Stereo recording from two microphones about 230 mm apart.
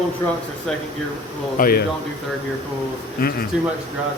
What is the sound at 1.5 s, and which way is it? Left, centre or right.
Speech, left.